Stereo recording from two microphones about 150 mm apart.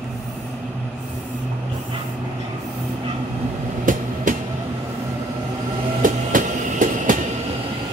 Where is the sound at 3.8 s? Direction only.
65° right (ahead or behind).